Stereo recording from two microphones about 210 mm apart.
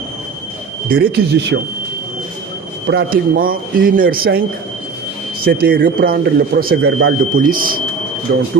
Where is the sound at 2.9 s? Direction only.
45° right (ahead or behind).